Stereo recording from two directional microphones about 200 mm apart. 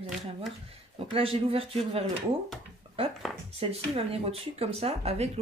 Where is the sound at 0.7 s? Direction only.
30° right (ahead or behind).